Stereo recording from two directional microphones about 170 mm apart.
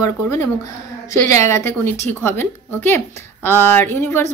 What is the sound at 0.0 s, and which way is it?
Speech, 15° left (ahead or behind).